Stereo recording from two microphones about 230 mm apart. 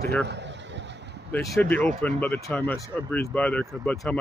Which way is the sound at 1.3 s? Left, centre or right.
Centre.